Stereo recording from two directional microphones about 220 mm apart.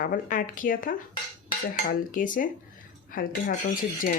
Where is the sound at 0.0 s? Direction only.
40° left (ahead or behind).